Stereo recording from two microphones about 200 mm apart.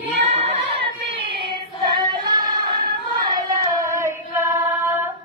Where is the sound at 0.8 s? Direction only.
25° right (ahead or behind).